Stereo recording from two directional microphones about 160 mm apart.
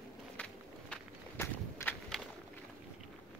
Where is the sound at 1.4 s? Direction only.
15° left (ahead or behind).